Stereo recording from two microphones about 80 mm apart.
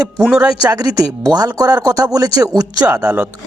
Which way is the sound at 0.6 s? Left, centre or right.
Right.